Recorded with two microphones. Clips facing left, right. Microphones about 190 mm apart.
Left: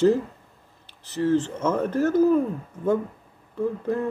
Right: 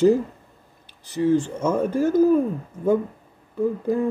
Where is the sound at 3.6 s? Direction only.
10° right (ahead or behind).